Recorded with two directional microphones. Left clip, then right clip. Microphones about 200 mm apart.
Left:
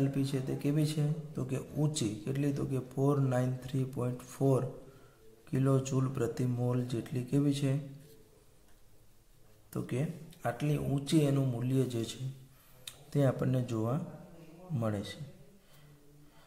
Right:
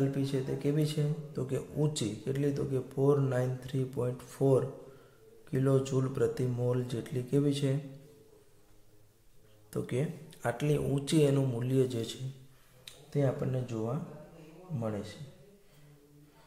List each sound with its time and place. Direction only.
0.1 s speech: 15° left (ahead or behind)
9.7 s a man's voice: 5° left (ahead or behind)
12.8 s a man's voice: 25° left (ahead or behind)